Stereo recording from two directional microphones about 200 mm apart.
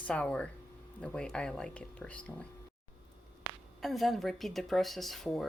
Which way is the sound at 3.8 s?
Centre (ahead or behind).